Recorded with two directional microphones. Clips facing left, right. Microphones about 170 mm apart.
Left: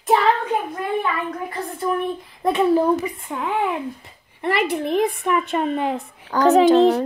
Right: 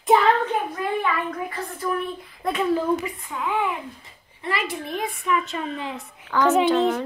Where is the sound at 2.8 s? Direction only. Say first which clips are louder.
Left 4 dB; 35° left (ahead or behind).